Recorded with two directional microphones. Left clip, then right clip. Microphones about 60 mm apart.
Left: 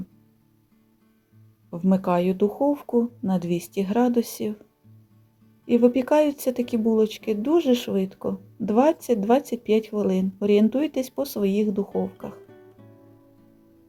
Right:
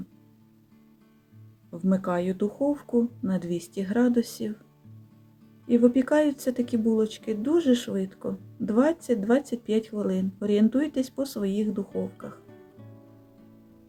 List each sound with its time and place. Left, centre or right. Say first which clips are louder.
1.9 s speech: left 5 dB; left
2.6 s speech: left 3 dB; left
5.6 s speech: left 3 dB; left
11.9 s speech: left 5 dB; centre
12.5 s music: left 1 dB; centre